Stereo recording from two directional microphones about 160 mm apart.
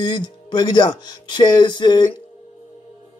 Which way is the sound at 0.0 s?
25° left (ahead or behind).